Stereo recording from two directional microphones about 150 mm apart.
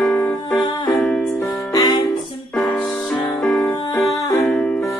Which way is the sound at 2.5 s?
5° left (ahead or behind).